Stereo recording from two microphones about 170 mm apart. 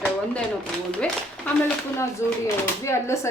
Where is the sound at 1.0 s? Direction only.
10° left (ahead or behind).